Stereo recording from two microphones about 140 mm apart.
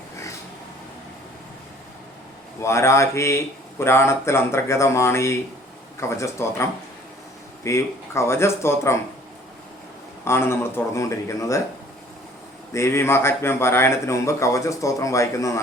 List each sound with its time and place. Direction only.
2.6 s a man's voice: 20° left (ahead or behind)
10.2 s a man's voice: 20° left (ahead or behind)
12.7 s a man's voice: 20° left (ahead or behind)